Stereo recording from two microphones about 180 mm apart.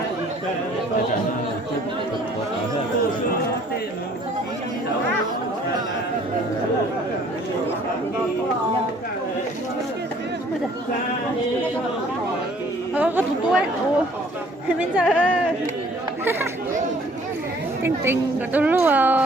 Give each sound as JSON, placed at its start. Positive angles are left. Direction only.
{"t": 12.9, "sound": "speech", "side_deg": -10}
{"t": 14.8, "sound": "speech", "side_deg": -5}
{"t": 16.2, "sound": "chatter", "side_deg": -10}
{"t": 17.8, "sound": "speech", "side_deg": -15}